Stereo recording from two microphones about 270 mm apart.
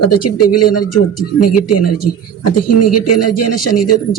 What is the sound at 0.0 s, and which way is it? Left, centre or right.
A man's voice, left.